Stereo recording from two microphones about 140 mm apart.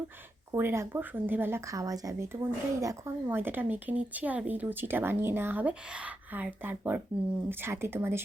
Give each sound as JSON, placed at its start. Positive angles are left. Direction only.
{"t": 0.5, "sound": "speech", "side_deg": -20}